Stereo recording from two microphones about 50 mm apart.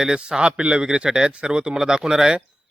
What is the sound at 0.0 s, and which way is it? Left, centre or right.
Speech, centre.